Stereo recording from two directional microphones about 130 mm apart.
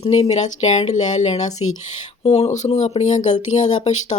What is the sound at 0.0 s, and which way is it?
Speech, 55° left (ahead or behind).